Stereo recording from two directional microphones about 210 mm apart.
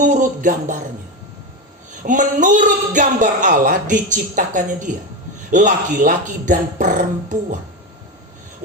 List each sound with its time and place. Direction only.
0.0 s speech: 35° right (ahead or behind)
2.0 s speech: 35° right (ahead or behind)